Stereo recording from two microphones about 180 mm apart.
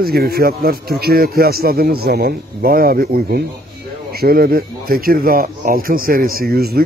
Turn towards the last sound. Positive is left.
turn(degrees=-60)  # may be behind; listen again after turning